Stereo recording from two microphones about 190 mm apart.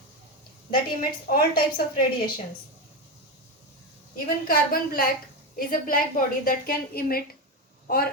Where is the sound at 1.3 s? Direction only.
50° left (ahead or behind).